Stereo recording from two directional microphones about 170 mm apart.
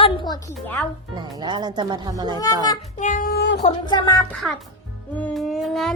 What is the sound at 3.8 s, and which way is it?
Speech, 25° left (ahead or behind).